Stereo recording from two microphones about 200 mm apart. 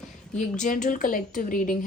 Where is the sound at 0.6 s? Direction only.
40° left (ahead or behind).